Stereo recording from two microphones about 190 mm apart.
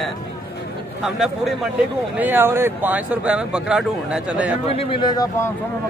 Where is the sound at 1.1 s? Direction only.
Centre (ahead or behind).